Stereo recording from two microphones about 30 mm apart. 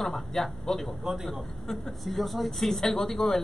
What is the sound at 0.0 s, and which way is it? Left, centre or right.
Speech, centre.